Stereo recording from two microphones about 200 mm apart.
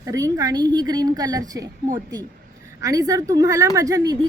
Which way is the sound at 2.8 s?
15° right (ahead or behind).